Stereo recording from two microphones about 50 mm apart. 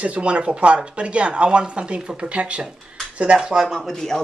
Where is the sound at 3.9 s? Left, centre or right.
Centre.